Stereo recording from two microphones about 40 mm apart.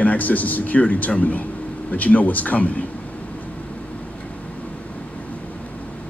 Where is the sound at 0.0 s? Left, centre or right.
Left.